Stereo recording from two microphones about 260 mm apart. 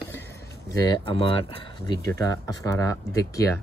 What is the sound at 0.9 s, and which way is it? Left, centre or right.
Speech, centre.